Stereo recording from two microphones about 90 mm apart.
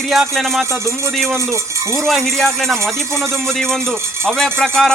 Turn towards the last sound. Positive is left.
turn(degrees=5)  # may be behind; listen again after turning